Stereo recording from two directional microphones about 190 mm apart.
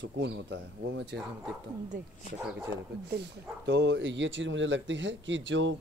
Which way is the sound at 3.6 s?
65° right (ahead or behind).